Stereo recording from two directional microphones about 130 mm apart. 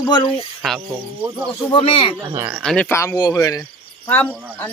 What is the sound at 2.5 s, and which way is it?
Speech, 5° left (ahead or behind).